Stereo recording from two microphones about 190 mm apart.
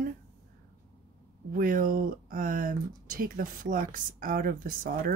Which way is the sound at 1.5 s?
45° right (ahead or behind).